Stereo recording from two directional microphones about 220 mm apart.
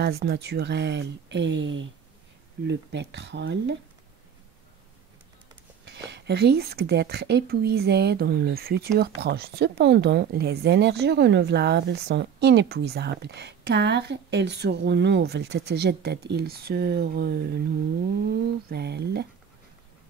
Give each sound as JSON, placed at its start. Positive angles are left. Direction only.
{"t": 0.0, "sound": "speech", "side_deg": -50}
{"t": 5.9, "sound": "speech", "side_deg": -50}